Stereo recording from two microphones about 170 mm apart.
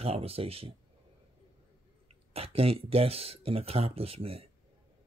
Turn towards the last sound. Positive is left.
turn(degrees=-35)  # may be behind; listen again after turning